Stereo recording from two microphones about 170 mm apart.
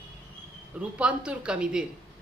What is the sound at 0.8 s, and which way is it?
Speech, 5° right (ahead or behind).